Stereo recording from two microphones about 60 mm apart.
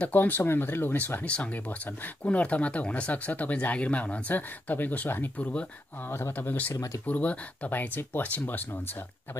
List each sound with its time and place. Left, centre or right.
0.0 s speech: left
5.4 s speech: left
6.7 s speech: left
7.1 s speech: left